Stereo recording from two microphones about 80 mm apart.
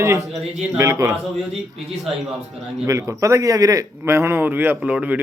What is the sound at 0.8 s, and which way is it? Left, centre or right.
Speech, right.